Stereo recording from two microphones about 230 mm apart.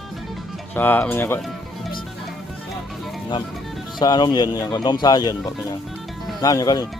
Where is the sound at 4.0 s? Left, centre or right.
Centre.